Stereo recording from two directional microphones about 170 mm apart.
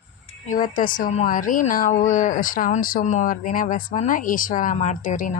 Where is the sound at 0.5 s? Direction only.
50° left (ahead or behind).